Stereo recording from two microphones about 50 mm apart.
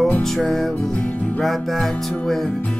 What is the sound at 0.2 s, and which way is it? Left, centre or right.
Music, centre.